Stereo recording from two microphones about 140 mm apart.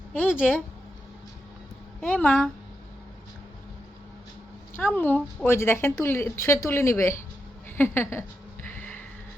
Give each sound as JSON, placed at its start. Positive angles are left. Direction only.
{"t": 0.1, "sound": "a woman's voice", "side_deg": 10}
{"t": 2.0, "sound": "a woman's voice", "side_deg": 10}
{"t": 4.8, "sound": "a woman's voice", "side_deg": 15}